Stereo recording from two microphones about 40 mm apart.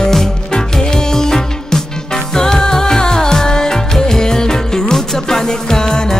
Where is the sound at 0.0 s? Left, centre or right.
Centre.